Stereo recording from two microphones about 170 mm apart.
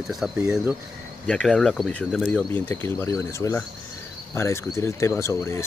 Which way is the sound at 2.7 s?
15° left (ahead or behind).